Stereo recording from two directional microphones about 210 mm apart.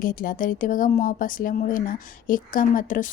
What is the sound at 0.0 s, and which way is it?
Speech, 45° left (ahead or behind).